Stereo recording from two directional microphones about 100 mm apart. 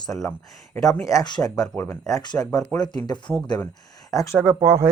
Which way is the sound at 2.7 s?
45° left (ahead or behind).